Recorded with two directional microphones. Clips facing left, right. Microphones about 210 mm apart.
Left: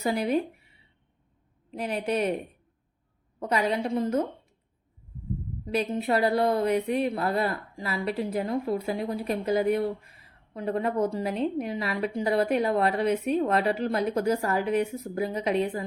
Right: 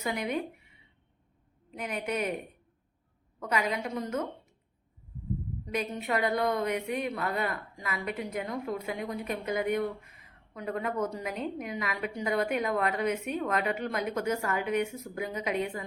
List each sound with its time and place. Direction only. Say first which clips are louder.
0.0 s a woman's voice: left 6 dB; 35° left (ahead or behind)
3.4 s a woman's voice: left 5 dB; 35° left (ahead or behind)
5.6 s a woman's voice: left 6 dB; 30° left (ahead or behind)